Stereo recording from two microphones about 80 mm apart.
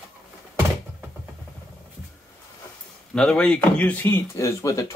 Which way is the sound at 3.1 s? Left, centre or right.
Centre.